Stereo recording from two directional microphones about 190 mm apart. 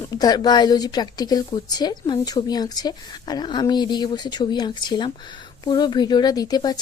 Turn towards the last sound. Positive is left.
turn(degrees=20)  # may be behind; listen again after turning